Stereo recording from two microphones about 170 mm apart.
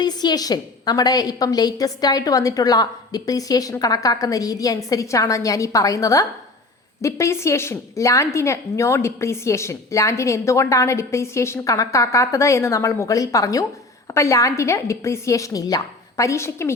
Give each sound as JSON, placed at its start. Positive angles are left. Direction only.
{"t": 0.0, "sound": "a woman's voice", "side_deg": 25}